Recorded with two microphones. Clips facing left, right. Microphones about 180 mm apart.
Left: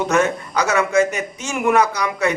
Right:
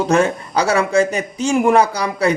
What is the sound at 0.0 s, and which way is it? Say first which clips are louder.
A man's voice: right 2 dB; 30° right (ahead or behind).